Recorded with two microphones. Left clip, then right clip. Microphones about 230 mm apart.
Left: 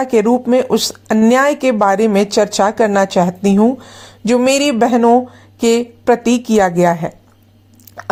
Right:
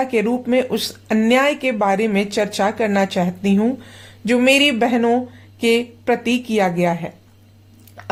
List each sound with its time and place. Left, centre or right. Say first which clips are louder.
0.0 s speech: left 6 dB; left